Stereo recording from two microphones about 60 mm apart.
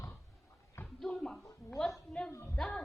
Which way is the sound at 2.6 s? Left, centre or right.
Centre.